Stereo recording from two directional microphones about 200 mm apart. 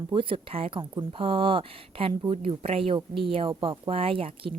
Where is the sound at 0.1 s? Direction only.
25° right (ahead or behind).